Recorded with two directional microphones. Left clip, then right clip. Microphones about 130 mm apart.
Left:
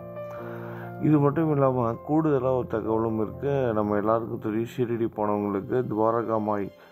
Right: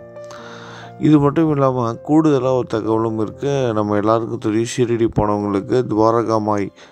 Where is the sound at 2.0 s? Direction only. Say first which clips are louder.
Right 10 dB; 50° right (ahead or behind).